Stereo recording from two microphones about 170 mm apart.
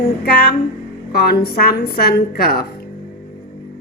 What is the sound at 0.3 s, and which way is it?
A woman's voice, 70° left (ahead or behind).